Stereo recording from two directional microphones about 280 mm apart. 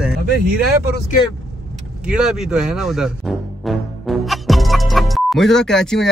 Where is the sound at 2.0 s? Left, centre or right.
Centre.